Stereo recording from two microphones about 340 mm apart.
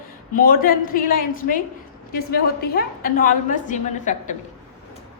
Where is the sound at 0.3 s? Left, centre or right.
Left.